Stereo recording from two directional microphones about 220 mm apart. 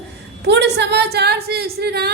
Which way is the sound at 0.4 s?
50° right (ahead or behind).